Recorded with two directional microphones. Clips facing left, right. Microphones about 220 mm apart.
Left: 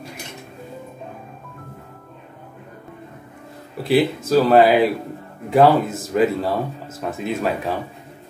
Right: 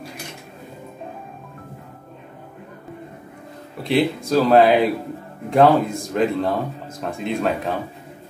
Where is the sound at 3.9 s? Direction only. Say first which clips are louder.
Left 2 dB; 5° left (ahead or behind).